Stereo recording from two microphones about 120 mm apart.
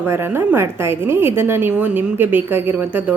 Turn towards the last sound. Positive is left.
turn(degrees=-15)  # may be behind; listen again after turning